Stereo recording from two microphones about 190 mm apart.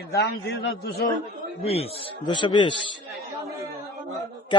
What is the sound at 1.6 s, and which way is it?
Speech, 30° left (ahead or behind).